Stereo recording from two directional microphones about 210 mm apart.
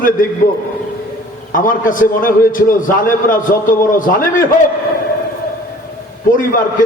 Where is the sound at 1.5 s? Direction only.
40° left (ahead or behind).